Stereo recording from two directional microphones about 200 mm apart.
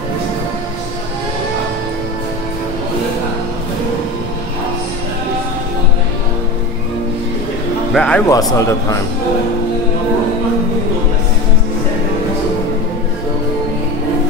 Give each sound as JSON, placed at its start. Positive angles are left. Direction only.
{"t": 7.9, "sound": "speech", "side_deg": 5}
{"t": 8.3, "sound": "a man's voice", "side_deg": 15}